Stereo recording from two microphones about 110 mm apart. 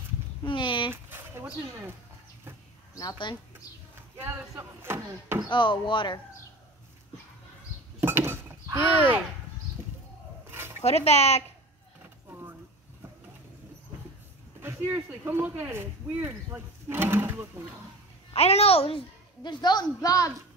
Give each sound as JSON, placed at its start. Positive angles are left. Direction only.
{"t": 0.4, "sound": "speech", "side_deg": 45}
{"t": 1.1, "sound": "speech", "side_deg": -20}
{"t": 2.9, "sound": "speech", "side_deg": 35}
{"t": 4.2, "sound": "speech", "side_deg": -20}
{"t": 5.5, "sound": "a child's voice", "side_deg": 45}
{"t": 8.0, "sound": "chink", "side_deg": -20}
{"t": 10.5, "sound": "a sound", "side_deg": -20}
{"t": 10.8, "sound": "speech", "side_deg": 75}
{"t": 12.3, "sound": "a sound", "side_deg": -20}
{"t": 14.6, "sound": "speech", "side_deg": -20}
{"t": 18.3, "sound": "a child's voice", "side_deg": 70}